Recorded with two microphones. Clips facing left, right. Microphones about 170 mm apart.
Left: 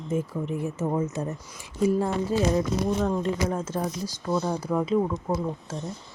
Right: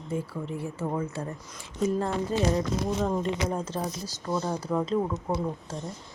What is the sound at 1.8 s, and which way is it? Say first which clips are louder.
Speech: left 3 dB; 10° left (ahead or behind).